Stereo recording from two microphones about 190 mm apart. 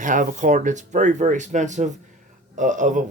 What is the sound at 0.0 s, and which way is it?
Speech, 45° right (ahead or behind).